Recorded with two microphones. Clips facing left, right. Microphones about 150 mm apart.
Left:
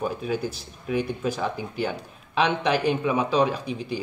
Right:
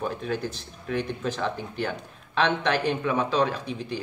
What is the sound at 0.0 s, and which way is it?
A man's voice, 10° left (ahead or behind).